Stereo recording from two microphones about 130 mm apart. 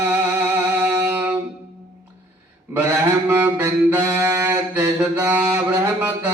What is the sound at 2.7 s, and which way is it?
Mantra, 15° right (ahead or behind).